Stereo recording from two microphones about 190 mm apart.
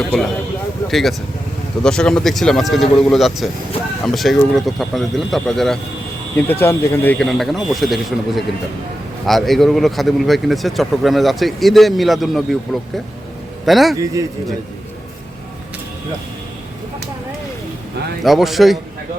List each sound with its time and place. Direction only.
0.0 s speech: centre (ahead or behind)
9.2 s speech: centre (ahead or behind)
13.9 s a man's voice: 15° right (ahead or behind)
18.2 s speech: centre (ahead or behind)